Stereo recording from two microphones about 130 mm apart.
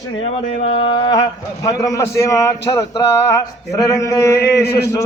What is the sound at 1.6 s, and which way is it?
A man's voice, 25° left (ahead or behind).